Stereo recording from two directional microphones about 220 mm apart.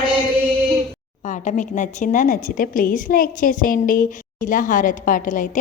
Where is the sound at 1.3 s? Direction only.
35° left (ahead or behind).